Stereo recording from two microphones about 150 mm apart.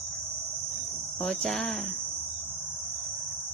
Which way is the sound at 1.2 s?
Centre (ahead or behind).